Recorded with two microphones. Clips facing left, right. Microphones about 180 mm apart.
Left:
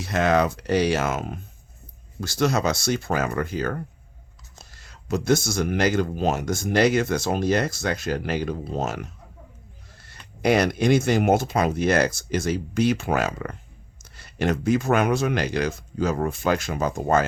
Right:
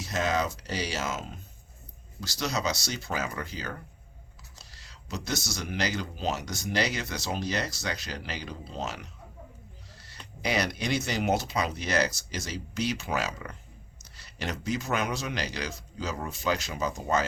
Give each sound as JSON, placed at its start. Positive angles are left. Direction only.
{"t": 0.0, "sound": "speech", "side_deg": 60}